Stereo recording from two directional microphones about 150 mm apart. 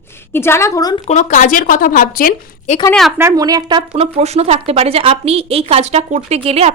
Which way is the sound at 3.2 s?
20° right (ahead or behind).